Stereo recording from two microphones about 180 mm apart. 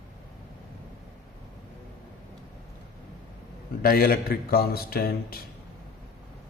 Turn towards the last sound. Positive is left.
turn(degrees=55)  # may be behind; listen again after turning